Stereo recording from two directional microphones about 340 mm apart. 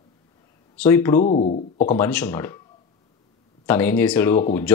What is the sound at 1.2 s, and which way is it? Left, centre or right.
Speech, left.